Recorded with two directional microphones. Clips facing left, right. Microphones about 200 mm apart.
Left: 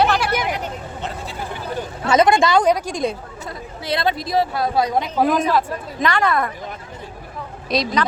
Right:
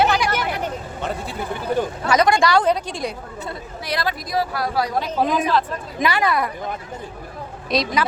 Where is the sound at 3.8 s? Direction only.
25° left (ahead or behind).